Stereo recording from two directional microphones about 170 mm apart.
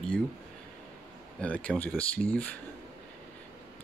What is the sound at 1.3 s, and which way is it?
Speech, 10° left (ahead or behind).